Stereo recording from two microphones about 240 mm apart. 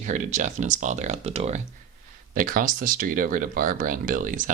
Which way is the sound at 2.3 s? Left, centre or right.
Right.